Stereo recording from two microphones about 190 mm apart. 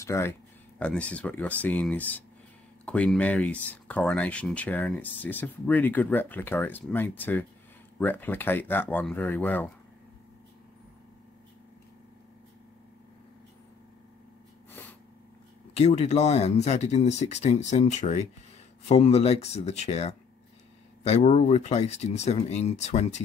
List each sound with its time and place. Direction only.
0.0 s speech: 15° left (ahead or behind)
14.7 s sneeze: 10° left (ahead or behind)
15.7 s speech: 35° left (ahead or behind)